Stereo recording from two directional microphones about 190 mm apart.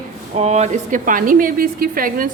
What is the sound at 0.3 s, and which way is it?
A woman's voice, 35° right (ahead or behind).